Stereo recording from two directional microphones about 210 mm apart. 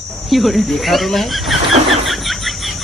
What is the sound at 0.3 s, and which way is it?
Speech, centre (ahead or behind).